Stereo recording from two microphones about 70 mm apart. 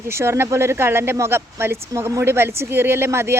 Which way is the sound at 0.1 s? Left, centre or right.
Right.